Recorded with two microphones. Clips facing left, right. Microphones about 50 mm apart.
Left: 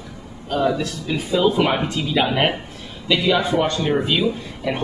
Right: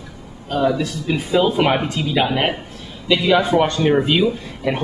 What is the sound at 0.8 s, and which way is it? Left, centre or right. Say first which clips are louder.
Speech: right 3 dB; centre.